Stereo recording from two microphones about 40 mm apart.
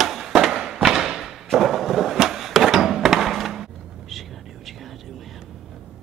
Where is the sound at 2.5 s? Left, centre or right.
Centre.